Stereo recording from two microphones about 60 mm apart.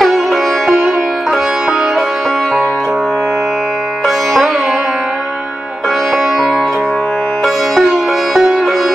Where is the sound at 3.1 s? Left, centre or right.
Right.